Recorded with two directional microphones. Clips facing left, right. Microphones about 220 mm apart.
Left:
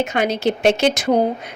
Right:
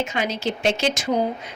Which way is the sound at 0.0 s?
60° left (ahead or behind).